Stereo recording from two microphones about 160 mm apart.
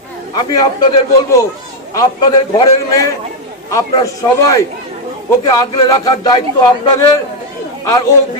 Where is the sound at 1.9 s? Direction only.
25° left (ahead or behind).